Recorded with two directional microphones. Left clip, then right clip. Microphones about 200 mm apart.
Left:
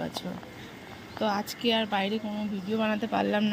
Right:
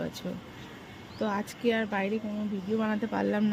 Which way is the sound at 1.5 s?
15° right (ahead or behind).